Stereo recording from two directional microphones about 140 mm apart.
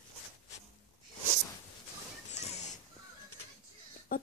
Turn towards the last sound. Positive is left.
turn(degrees=90)